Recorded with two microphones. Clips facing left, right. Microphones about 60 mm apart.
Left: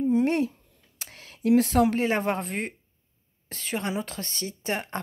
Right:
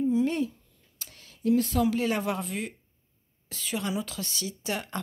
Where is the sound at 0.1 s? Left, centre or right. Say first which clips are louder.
Left 3 dB; left.